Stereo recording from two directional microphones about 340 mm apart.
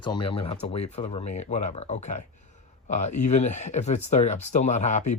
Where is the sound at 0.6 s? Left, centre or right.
Left.